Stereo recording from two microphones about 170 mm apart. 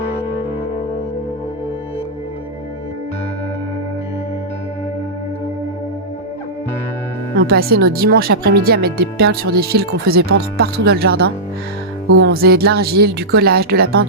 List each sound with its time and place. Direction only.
7.3 s speech: 65° right (ahead or behind)